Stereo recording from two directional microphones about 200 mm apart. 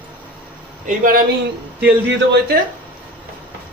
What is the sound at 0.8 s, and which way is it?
Speech, 40° right (ahead or behind).